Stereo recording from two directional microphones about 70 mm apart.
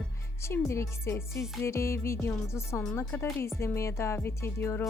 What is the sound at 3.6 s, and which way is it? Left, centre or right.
Speech, left.